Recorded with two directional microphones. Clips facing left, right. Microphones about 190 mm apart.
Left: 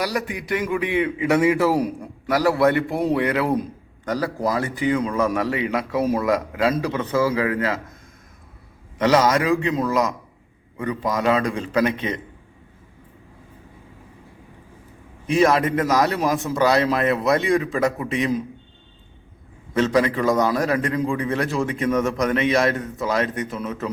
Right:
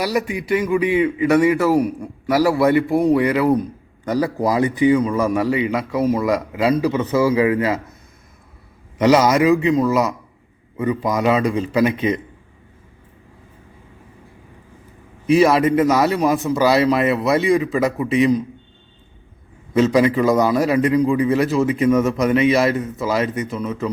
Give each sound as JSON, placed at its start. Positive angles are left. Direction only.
{"t": 0.0, "sound": "a man's voice", "side_deg": -10}
{"t": 4.0, "sound": "a man's voice", "side_deg": -10}
{"t": 9.0, "sound": "a man's voice", "side_deg": -10}
{"t": 15.3, "sound": "a man's voice", "side_deg": -5}
{"t": 19.7, "sound": "a man's voice", "side_deg": -10}